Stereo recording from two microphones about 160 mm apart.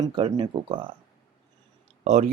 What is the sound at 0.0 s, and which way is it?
Speech, 30° right (ahead or behind).